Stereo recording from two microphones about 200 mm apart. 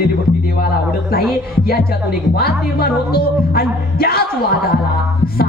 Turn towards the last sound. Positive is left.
turn(degrees=50)  # may be behind; listen again after turning